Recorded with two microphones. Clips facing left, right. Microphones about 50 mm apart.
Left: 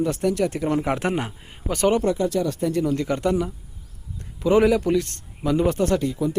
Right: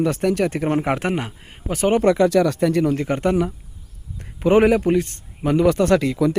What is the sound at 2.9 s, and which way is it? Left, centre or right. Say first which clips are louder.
A man's voice: right 3 dB; right.